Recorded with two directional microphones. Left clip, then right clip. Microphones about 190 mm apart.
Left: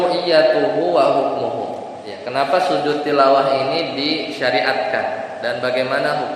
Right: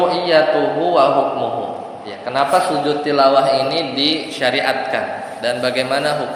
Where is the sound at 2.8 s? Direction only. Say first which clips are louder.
Right 1 dB; 30° right (ahead or behind).